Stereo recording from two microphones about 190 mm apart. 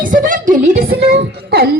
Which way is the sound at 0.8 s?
65° right (ahead or behind).